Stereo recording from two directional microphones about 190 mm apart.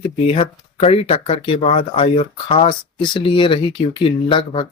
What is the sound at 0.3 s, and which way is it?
Speech, 30° left (ahead or behind).